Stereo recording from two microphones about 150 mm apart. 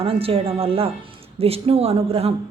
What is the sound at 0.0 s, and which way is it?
Speech, 40° right (ahead or behind).